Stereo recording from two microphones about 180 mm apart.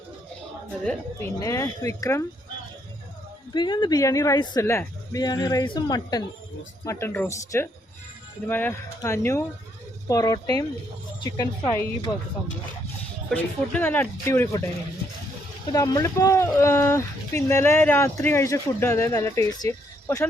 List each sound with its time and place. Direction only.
0.9 s speech: 15° left (ahead or behind)
3.5 s speech: 25° left (ahead or behind)
13.3 s speech: 10° left (ahead or behind)
15.6 s speech: 20° left (ahead or behind)